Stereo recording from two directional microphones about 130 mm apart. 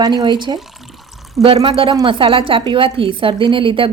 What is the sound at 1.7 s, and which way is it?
A woman's voice, 45° right (ahead or behind).